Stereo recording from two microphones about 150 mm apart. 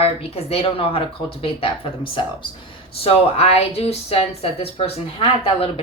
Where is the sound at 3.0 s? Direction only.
45° left (ahead or behind).